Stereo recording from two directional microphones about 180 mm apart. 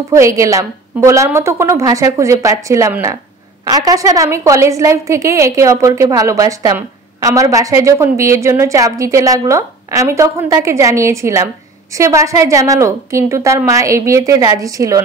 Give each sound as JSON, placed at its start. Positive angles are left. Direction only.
{"t": 0.1, "sound": "a woman's voice", "side_deg": -15}